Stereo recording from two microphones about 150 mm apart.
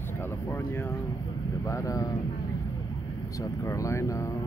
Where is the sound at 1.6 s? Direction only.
20° left (ahead or behind).